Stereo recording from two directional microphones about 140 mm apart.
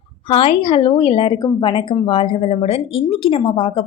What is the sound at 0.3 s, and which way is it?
A woman's voice, 40° left (ahead or behind).